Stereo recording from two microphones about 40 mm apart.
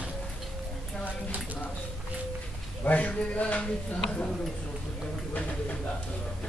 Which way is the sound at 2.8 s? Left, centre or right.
Left.